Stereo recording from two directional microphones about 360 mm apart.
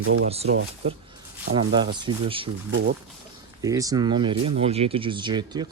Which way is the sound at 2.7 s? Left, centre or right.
Right.